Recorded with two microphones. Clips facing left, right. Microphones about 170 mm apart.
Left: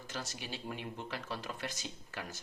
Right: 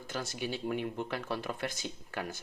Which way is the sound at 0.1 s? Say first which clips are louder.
Right 7 dB; 55° right (ahead or behind).